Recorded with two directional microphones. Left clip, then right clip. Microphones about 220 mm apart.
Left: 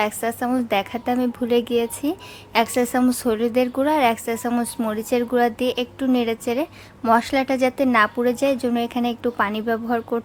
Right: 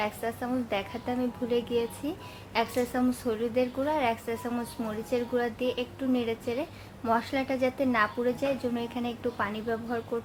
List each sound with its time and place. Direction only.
0.0 s a woman's voice: 45° left (ahead or behind)